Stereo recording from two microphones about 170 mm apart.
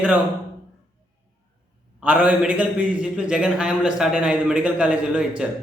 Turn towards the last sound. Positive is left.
turn(degrees=-5)  # may be behind; listen again after turning